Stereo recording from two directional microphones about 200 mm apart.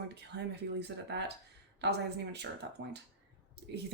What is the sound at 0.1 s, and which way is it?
Speech, 55° right (ahead or behind).